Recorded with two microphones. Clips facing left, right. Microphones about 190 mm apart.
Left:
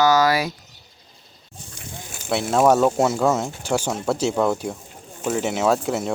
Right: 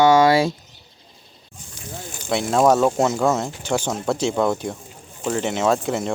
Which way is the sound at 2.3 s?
5° left (ahead or behind).